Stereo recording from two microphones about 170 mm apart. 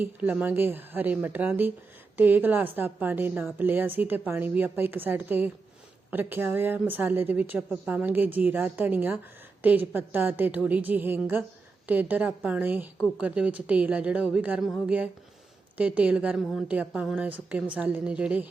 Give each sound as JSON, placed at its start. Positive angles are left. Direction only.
{"t": 0.0, "sound": "a woman's voice", "side_deg": -10}